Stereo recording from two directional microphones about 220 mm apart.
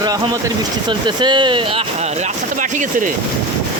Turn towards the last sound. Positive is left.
turn(degrees=-35)  # may be behind; listen again after turning